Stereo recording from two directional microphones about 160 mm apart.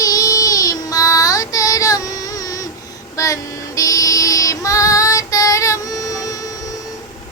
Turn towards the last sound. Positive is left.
turn(degrees=20)  # may be behind; listen again after turning